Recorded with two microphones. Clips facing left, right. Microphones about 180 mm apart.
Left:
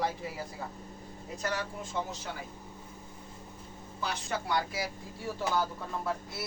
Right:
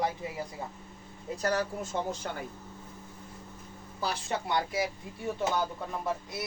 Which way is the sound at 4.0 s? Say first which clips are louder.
Right 2 dB; 30° right (ahead or behind).